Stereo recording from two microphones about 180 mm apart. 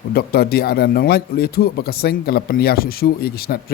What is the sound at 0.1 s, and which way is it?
Speech, 60° left (ahead or behind).